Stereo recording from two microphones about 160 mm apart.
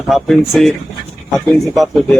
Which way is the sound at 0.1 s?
Centre (ahead or behind).